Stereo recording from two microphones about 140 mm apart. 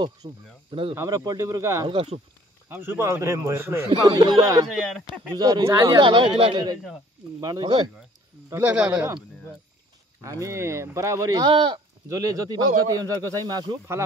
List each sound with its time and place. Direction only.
0.0 s speech: 35° right (ahead or behind)
0.9 s speech: 25° right (ahead or behind)
1.9 s speech: 45° right (ahead or behind)
2.7 s speech: 15° right (ahead or behind)
4.6 s speech: centre (ahead or behind)
5.0 s speech: 30° right (ahead or behind)
8.5 s speech: 10° right (ahead or behind)
10.4 s speech: 20° right (ahead or behind); by 11.8 s 35° right (ahead or behind)
12.1 s speech: 25° right (ahead or behind)